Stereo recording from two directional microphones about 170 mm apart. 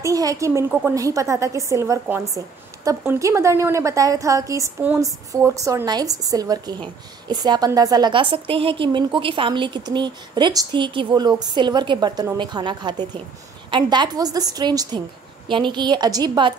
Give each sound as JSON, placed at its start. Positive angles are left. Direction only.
{"t": 0.0, "sound": "a woman's voice", "side_deg": -20}